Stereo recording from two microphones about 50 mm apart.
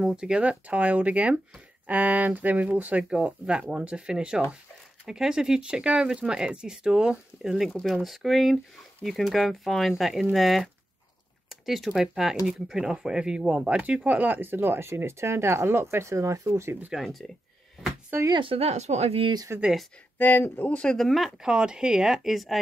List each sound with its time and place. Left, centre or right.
0.0 s speech: centre
11.4 s a sound: centre
11.9 s speech: centre; by 16.7 s right
17.0 s speech: centre
18.1 s speech: right
19.5 s speech: right
20.2 s speech: left
20.8 s speech: centre
21.4 s speech: centre